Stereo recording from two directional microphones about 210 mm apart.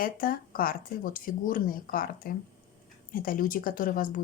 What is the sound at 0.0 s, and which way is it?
Speech, 45° left (ahead or behind).